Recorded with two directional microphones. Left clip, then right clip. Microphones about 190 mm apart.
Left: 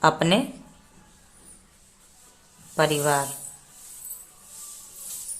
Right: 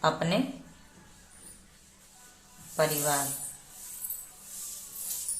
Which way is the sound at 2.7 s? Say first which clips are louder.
Left 6 dB; 50° left (ahead or behind).